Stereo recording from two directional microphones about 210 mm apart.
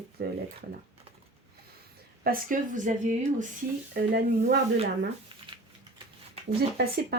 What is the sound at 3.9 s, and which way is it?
Speech, 50° right (ahead or behind).